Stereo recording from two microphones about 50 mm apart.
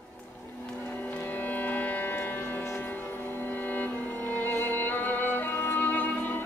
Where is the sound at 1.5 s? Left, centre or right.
Left.